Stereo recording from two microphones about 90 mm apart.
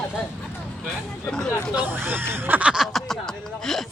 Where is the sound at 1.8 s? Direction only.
25° right (ahead or behind).